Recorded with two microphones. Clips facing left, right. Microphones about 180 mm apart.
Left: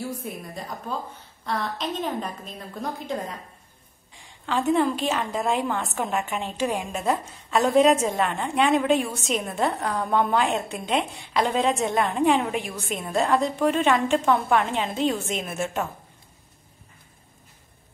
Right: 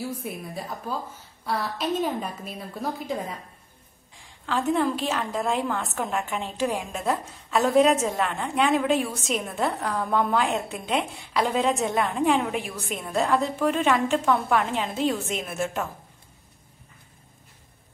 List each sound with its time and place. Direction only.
0.0 s a woman's voice: 5° right (ahead or behind)
4.5 s a woman's voice: centre (ahead or behind)